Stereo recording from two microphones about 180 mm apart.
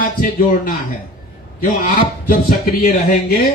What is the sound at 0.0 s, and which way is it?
Speech, 50° left (ahead or behind).